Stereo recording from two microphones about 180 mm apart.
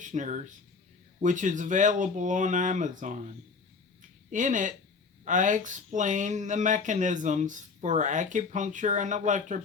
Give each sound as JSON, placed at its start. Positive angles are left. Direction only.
{"t": 0.0, "sound": "speech", "side_deg": -40}